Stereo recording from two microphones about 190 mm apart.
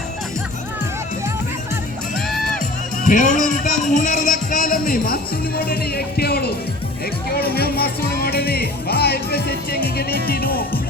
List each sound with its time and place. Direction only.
2.1 s music: centre (ahead or behind)
3.0 s music: 40° left (ahead or behind)
8.2 s speech: 55° left (ahead or behind)
10.2 s music: 50° left (ahead or behind)